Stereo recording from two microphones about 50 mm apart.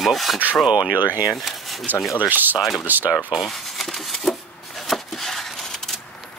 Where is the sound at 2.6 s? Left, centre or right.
Centre.